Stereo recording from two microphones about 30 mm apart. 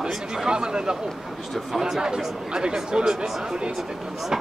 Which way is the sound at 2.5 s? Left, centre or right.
Right.